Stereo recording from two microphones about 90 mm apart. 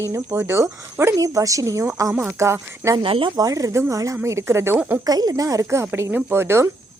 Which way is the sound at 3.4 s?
40° right (ahead or behind).